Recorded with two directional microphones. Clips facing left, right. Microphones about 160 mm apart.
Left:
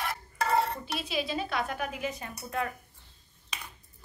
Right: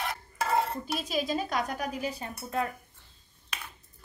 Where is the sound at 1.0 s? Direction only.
45° right (ahead or behind).